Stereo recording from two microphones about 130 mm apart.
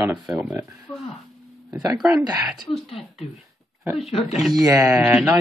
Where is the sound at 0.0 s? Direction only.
10° right (ahead or behind).